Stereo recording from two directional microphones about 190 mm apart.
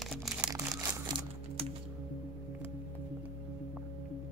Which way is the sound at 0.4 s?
20° right (ahead or behind).